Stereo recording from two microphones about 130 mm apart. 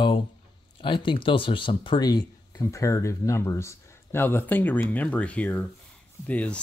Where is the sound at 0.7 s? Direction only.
40° left (ahead or behind).